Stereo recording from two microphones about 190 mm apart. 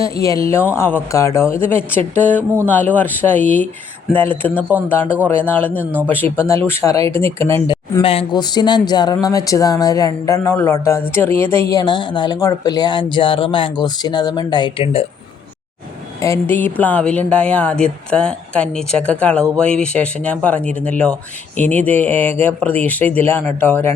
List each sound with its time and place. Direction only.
0.2 s speech: 15° left (ahead or behind)
5.0 s a man's voice: 10° right (ahead or behind)
5.3 s speech: 10° left (ahead or behind)
5.8 s a man's voice: 10° right (ahead or behind)
6.1 s speech: 10° left (ahead or behind)
7.7 s speech: 25° left (ahead or behind)
16.2 s speech: 15° left (ahead or behind)